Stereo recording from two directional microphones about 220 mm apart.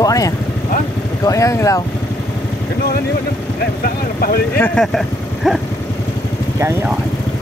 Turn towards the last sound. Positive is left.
turn(degrees=0)  # may be behind; listen again after turning